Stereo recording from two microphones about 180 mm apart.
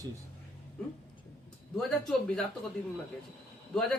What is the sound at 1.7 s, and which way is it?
Speech, 5° left (ahead or behind).